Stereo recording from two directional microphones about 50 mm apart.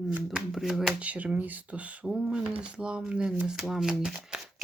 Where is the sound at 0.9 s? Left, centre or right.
Right.